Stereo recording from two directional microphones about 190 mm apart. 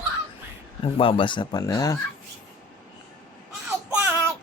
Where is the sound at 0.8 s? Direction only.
30° left (ahead or behind).